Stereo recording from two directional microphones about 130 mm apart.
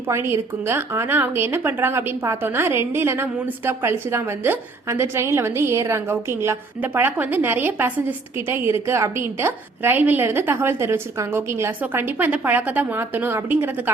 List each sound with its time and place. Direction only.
0.1 s a woman's voice: 20° right (ahead or behind)